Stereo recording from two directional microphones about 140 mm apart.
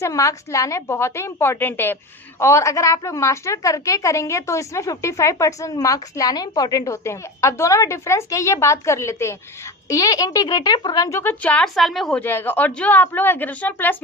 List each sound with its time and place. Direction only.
0.0 s a woman's voice: 25° left (ahead or behind); by 12.2 s centre (ahead or behind)
12.2 s a woman's voice: 15° left (ahead or behind)